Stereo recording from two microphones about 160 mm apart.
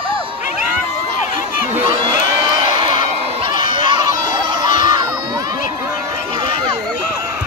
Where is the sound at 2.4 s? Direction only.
30° right (ahead or behind).